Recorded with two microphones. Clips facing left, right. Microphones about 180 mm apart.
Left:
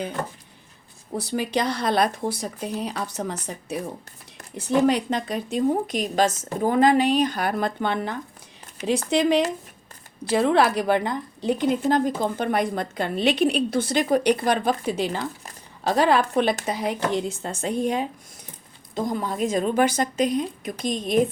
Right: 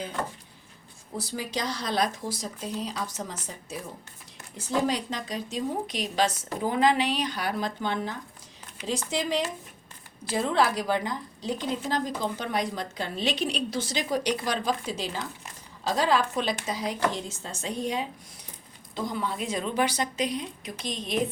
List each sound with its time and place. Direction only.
1.1 s a woman's voice: 65° left (ahead or behind)